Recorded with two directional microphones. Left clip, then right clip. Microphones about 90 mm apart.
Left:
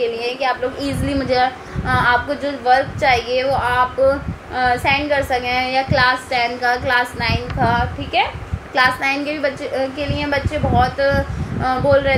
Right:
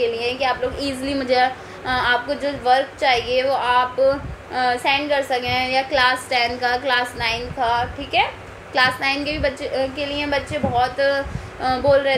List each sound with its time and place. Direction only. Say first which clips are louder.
0.0 s a woman's voice: left 1 dB; 30° right (ahead or behind)